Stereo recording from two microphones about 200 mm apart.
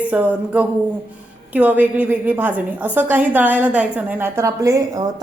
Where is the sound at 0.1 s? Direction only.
5° right (ahead or behind).